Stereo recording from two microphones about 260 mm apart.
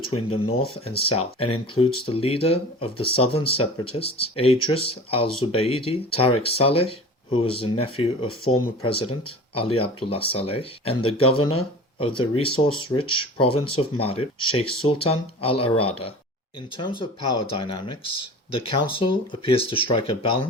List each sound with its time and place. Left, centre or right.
0.0 s speech: left
17.2 s speech: left
17.4 s speech: centre